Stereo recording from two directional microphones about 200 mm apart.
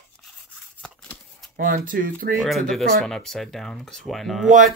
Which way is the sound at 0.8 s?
Centre (ahead or behind).